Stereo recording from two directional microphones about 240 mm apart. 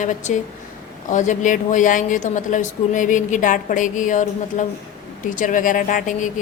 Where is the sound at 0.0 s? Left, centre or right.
Left.